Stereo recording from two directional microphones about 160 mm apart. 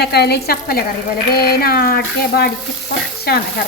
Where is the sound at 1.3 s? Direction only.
75° left (ahead or behind).